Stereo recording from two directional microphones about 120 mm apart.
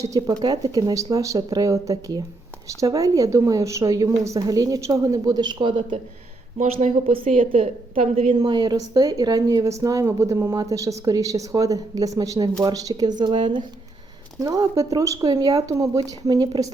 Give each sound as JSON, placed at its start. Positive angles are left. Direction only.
{"t": 0.0, "sound": "a woman's voice", "side_deg": -30}
{"t": 6.6, "sound": "speech", "side_deg": -90}
{"t": 7.5, "sound": "a woman's voice", "side_deg": -65}
{"t": 8.4, "sound": "a woman's voice", "side_deg": -35}
{"t": 14.3, "sound": "a woman's voice", "side_deg": -25}